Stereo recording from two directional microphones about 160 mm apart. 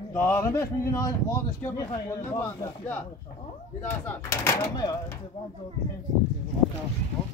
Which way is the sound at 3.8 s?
10° left (ahead or behind).